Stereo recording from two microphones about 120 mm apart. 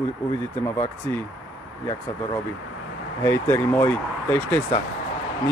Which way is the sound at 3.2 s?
20° left (ahead or behind).